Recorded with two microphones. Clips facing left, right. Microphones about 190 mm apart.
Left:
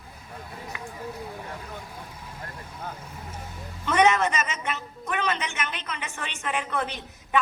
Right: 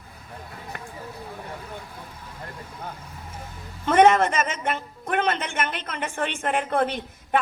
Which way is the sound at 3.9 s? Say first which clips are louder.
Right 4 dB; 55° right (ahead or behind).